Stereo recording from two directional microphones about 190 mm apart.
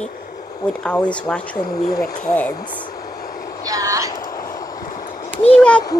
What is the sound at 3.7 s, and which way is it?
Speech, 20° right (ahead or behind).